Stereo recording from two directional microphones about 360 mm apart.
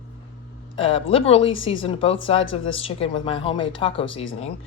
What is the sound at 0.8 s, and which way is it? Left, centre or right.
Speech, centre.